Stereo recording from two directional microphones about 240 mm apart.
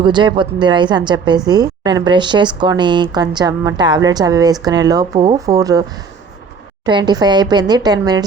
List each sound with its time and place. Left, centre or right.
0.0 s a woman's voice: centre
6.8 s speech: centre